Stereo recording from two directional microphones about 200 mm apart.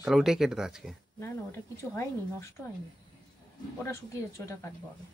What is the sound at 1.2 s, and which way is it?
Speech, 15° left (ahead or behind).